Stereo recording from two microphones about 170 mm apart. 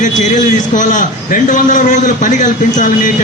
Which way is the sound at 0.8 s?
50° left (ahead or behind).